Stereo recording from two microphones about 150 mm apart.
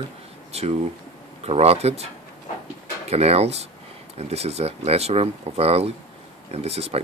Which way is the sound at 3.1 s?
45° right (ahead or behind).